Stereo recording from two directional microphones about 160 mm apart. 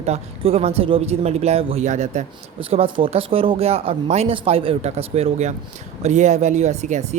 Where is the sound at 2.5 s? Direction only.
35° right (ahead or behind).